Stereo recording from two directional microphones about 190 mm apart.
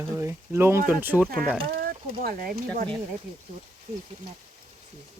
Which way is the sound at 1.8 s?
50° right (ahead or behind).